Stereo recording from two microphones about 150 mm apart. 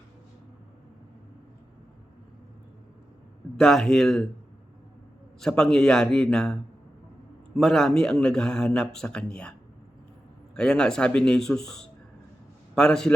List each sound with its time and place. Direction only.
3.6 s speech: 5° left (ahead or behind)
5.4 s speech: 5° left (ahead or behind)